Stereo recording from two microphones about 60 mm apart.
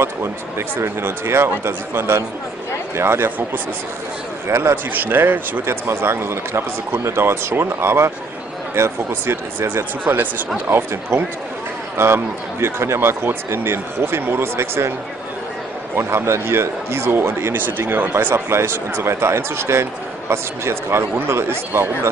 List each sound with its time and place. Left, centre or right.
0.0 s speech: right
3.3 s speech: right
4.5 s speech: right
4.9 s speech: right
5.9 s speech: right
10.7 s speech: right
16.0 s speech: right
18.3 s speech: right